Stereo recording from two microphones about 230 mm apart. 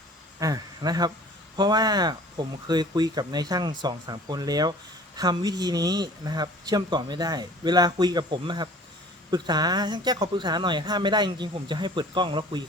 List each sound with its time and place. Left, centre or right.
0.3 s speech: centre